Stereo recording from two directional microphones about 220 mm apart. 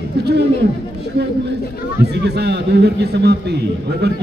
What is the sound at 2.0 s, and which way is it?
A man's voice, 50° right (ahead or behind).